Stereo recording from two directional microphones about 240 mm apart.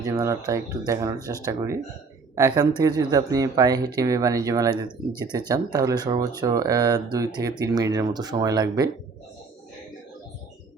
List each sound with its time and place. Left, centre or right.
0.0 s speech: centre